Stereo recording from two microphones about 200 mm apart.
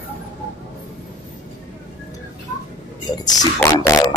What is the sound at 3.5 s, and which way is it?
Beatboxing, 15° left (ahead or behind).